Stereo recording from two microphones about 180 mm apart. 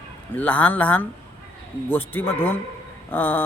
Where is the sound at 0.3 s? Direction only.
10° left (ahead or behind).